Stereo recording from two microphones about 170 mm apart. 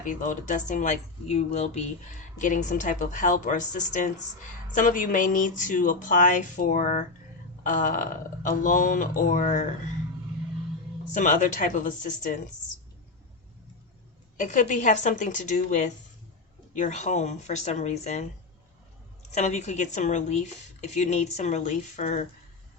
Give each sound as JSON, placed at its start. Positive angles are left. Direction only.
{"t": 0.0, "sound": "speech", "side_deg": 50}
{"t": 11.1, "sound": "speech", "side_deg": 50}
{"t": 14.3, "sound": "speech", "side_deg": 50}
{"t": 19.3, "sound": "speech", "side_deg": 40}